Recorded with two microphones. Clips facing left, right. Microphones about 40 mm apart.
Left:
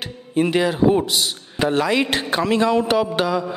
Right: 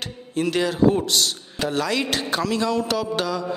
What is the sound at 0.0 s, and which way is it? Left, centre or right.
Speech, centre.